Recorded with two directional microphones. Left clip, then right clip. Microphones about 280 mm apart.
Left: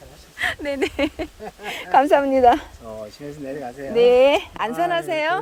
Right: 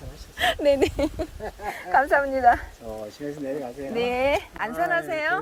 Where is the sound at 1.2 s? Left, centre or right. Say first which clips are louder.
Left 1 dB; left.